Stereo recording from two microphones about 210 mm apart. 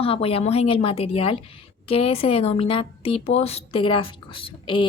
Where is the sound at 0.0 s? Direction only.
25° left (ahead or behind).